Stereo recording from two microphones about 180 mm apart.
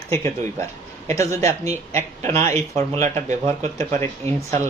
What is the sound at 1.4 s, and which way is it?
Speech, 35° right (ahead or behind).